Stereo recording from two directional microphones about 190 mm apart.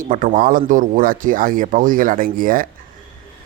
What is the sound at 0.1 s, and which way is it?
Speech, 45° right (ahead or behind).